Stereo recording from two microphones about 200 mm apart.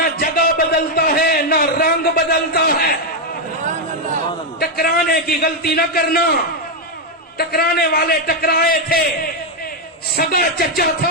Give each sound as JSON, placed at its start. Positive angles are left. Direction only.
{"t": 0.0, "sound": "a sound", "side_deg": 45}
{"t": 2.3, "sound": "a man's voice", "side_deg": 50}
{"t": 4.6, "sound": "a man's voice", "side_deg": 50}
{"t": 7.3, "sound": "a man's voice", "side_deg": 50}
{"t": 10.2, "sound": "a man's voice", "side_deg": 50}